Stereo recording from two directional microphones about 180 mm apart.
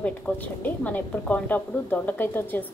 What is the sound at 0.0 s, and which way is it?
A woman's voice, 10° left (ahead or behind).